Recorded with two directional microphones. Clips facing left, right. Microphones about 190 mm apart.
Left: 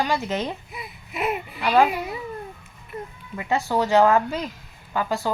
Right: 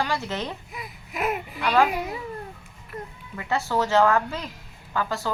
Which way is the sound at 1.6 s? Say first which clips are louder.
Left 2 dB; 20° left (ahead or behind).